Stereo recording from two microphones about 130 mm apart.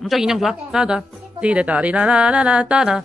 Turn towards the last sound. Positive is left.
turn(degrees=-5)  # may be behind; listen again after turning